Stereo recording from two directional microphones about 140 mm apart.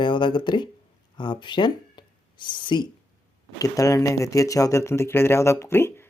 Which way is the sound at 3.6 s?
25° left (ahead or behind).